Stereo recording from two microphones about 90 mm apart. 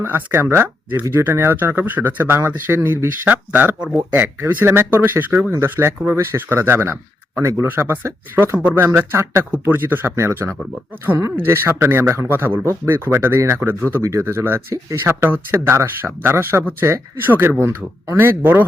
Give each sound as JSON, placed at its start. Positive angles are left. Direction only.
{"t": 0.0, "sound": "speech", "side_deg": -25}